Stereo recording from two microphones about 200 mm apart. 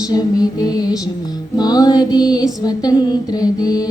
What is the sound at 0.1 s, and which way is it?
Music, 20° left (ahead or behind).